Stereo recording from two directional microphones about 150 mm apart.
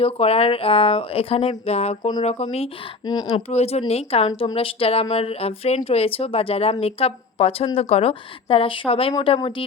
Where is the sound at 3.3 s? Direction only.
45° left (ahead or behind).